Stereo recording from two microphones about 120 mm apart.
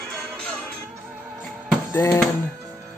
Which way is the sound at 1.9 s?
15° left (ahead or behind).